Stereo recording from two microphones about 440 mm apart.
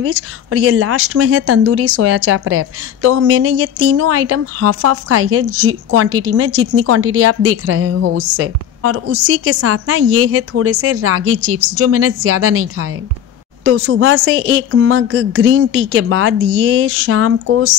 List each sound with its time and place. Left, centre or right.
0.0 s speech: right